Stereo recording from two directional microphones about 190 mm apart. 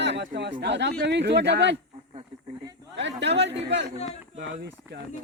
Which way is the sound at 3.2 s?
65° right (ahead or behind).